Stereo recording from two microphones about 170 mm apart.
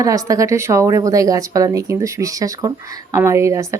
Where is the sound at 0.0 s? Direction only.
20° right (ahead or behind).